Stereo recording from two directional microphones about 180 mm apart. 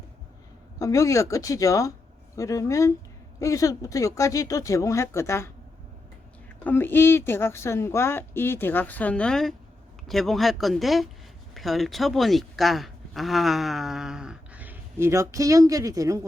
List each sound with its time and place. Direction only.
0.8 s speech: 15° left (ahead or behind)
6.7 s speech: 10° left (ahead or behind); by 16.2 s 20° right (ahead or behind)